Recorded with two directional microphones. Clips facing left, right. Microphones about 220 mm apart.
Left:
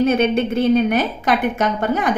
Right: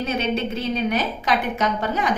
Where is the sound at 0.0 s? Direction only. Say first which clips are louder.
Left 8 dB; 55° left (ahead or behind).